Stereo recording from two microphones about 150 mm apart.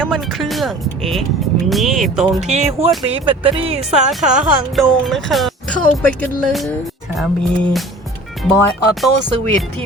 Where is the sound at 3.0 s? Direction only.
35° right (ahead or behind).